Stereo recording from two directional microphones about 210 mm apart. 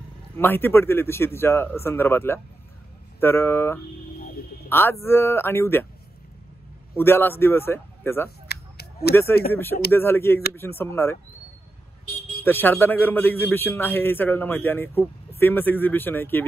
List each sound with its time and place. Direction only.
0.4 s a man's voice: 10° left (ahead or behind)
7.0 s a man's voice: 10° left (ahead or behind)
8.5 s a sound: 50° left (ahead or behind)
9.5 s a man's voice: 10° left (ahead or behind)
12.4 s a man's voice: 10° left (ahead or behind)